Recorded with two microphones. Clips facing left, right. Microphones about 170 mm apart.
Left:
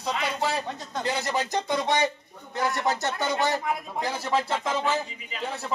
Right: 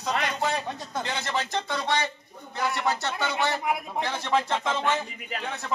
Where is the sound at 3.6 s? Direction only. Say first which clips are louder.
Right 1 dB; 15° right (ahead or behind).